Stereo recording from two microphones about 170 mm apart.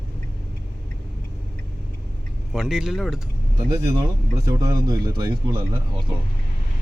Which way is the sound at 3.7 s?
20° right (ahead or behind).